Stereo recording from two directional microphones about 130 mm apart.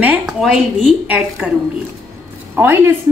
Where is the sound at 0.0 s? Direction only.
10° right (ahead or behind).